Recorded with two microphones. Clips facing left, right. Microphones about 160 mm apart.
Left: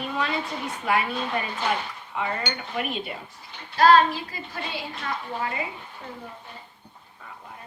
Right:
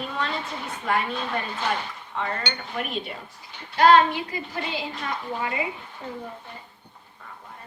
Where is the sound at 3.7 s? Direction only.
25° right (ahead or behind).